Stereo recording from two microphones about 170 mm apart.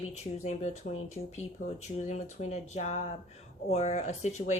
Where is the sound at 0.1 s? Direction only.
40° left (ahead or behind).